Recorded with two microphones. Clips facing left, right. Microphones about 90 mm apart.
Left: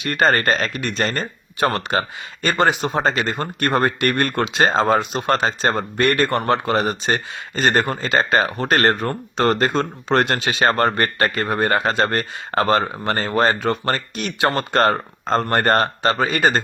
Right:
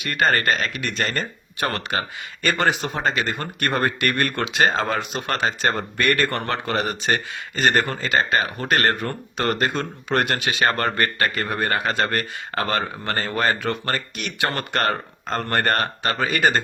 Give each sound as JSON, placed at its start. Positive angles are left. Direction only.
{"t": 0.0, "sound": "speech", "side_deg": 35}
{"t": 0.9, "sound": "speech", "side_deg": 25}